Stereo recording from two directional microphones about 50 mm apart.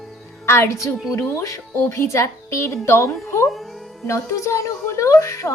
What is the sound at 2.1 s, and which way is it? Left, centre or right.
A woman's voice, left.